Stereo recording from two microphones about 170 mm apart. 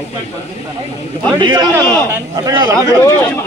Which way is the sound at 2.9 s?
10° left (ahead or behind).